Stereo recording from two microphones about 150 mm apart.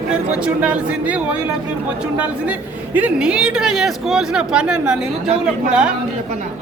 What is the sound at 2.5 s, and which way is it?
Speech, 10° right (ahead or behind).